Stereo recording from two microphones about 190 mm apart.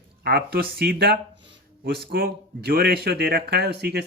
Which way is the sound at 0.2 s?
55° right (ahead or behind).